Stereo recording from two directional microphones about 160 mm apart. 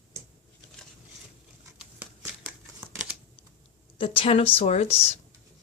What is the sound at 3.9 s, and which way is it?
Speech, 35° left (ahead or behind).